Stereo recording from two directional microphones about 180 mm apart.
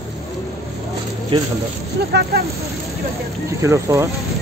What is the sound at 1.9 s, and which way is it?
Speech, 60° right (ahead or behind).